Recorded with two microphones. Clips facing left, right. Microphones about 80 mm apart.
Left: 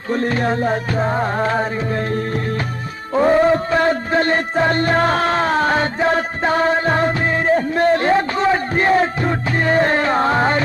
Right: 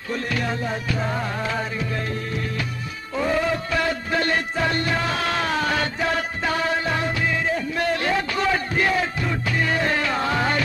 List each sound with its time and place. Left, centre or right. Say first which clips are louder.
0.1 s music: left 7 dB; left
3.2 s music: left 9 dB; left